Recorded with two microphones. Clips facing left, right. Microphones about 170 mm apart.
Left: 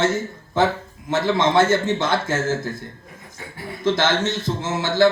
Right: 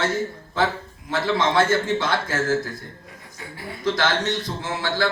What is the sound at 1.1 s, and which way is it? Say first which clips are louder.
A man's voice: left 3 dB; 25° left (ahead or behind).